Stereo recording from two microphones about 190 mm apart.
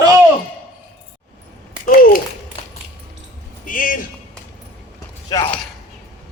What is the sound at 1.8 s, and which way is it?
Speech, 50° left (ahead or behind).